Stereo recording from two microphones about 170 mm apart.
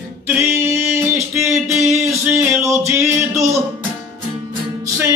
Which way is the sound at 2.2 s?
10° right (ahead or behind).